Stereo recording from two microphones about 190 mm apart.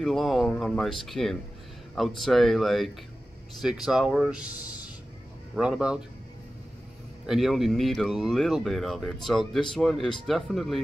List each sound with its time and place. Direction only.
0.0 s speech: centre (ahead or behind)
4.6 s music: 20° left (ahead or behind)
5.6 s speech: 5° right (ahead or behind)
7.2 s speech: centre (ahead or behind)